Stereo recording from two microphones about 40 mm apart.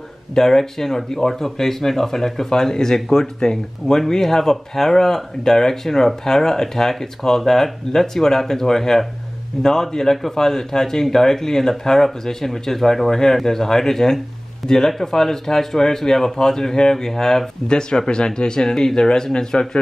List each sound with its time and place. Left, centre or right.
0.3 s speech: centre